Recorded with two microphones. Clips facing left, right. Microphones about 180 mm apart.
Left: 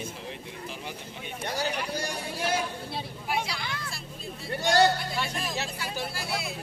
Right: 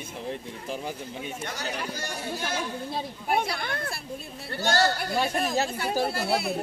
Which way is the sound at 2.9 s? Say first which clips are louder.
Right 6 dB; 55° right (ahead or behind).